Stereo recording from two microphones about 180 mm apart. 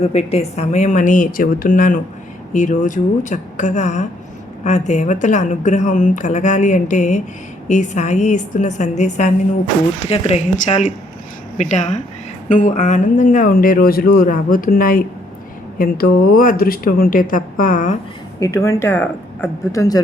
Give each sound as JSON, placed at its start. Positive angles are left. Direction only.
{"t": 0.0, "sound": "a woman's voice", "side_deg": 35}
{"t": 18.3, "sound": "speech", "side_deg": 15}